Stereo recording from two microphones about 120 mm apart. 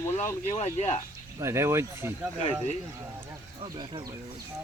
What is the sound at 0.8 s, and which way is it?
Speech, 65° left (ahead or behind).